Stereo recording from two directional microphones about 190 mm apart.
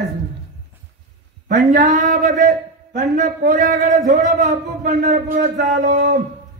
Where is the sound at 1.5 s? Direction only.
45° right (ahead or behind).